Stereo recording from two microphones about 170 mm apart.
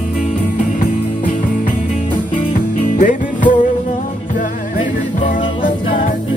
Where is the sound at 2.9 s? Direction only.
50° left (ahead or behind).